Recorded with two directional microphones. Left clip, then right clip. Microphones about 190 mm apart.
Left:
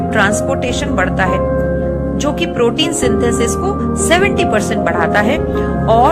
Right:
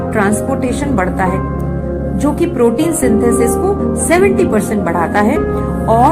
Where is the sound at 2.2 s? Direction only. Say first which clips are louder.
Right 2 dB; 30° left (ahead or behind).